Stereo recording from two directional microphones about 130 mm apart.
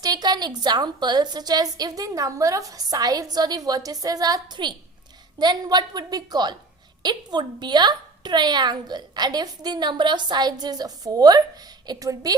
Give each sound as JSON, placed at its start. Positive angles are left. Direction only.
{"t": 0.0, "sound": "a woman's voice", "side_deg": -30}